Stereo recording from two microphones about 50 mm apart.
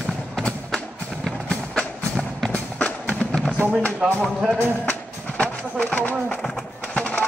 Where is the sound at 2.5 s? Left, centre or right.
Left.